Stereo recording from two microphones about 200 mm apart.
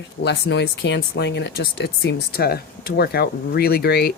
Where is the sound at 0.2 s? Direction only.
60° left (ahead or behind).